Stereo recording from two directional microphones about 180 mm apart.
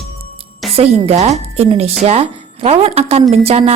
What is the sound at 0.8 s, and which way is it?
A woman's voice, 35° right (ahead or behind).